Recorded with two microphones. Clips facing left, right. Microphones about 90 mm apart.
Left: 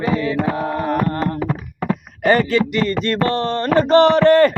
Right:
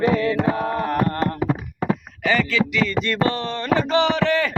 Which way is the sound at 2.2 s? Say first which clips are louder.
Left 5 dB; 45° left (ahead or behind).